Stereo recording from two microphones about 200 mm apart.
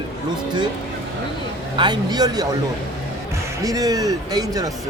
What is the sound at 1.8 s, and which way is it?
Speech, 20° right (ahead or behind).